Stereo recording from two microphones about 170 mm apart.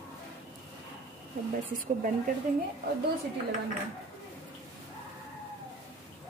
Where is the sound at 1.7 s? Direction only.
50° right (ahead or behind).